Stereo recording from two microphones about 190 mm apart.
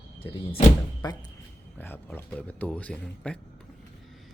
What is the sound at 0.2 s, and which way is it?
Speech, 30° left (ahead or behind).